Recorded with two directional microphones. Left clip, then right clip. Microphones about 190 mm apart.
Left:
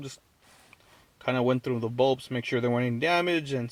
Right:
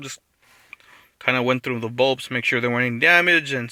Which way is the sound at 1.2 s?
15° right (ahead or behind).